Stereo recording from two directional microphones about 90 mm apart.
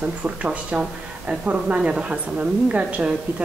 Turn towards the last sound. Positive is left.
turn(degrees=-15)  # may be behind; listen again after turning